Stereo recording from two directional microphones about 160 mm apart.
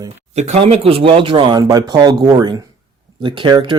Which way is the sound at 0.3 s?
45° right (ahead or behind).